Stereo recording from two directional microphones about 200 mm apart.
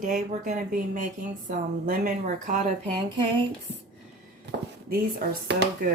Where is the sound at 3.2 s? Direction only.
25° right (ahead or behind).